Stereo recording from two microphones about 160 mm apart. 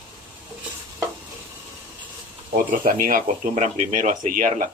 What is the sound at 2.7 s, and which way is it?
Speech, 60° right (ahead or behind).